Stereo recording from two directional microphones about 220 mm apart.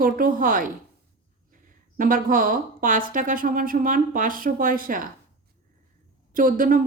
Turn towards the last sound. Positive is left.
turn(degrees=-40)  # may be behind; listen again after turning